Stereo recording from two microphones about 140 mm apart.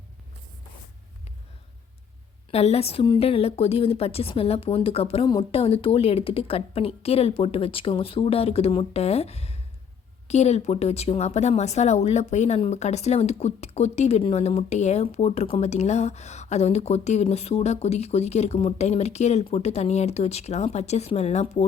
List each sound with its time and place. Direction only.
2.5 s speech: 50° left (ahead or behind)
5.2 s speech: 30° left (ahead or behind); by 21.7 s 55° left (ahead or behind)